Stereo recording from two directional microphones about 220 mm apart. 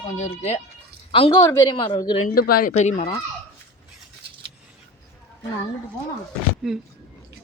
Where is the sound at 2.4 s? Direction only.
40° left (ahead or behind).